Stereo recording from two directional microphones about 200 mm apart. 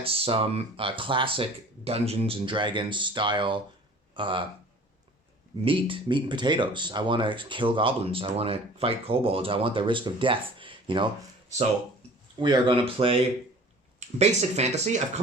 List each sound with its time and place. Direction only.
0.0 s speech: 30° right (ahead or behind)
5.6 s speech: 25° right (ahead or behind)
12.4 s speech: 25° right (ahead or behind)